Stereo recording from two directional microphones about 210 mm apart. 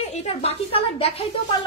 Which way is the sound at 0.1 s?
30° left (ahead or behind).